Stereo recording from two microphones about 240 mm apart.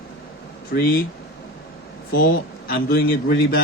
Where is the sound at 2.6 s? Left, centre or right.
Left.